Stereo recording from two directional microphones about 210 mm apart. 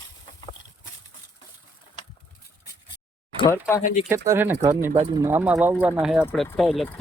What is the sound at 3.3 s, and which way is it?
Speech, 15° left (ahead or behind).